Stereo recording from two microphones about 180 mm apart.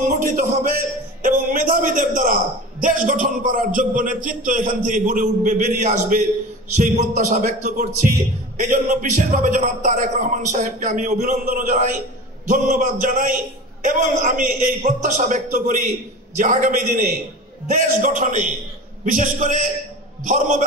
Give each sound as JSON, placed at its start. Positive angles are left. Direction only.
{"t": 0.1, "sound": "a man's voice", "side_deg": -45}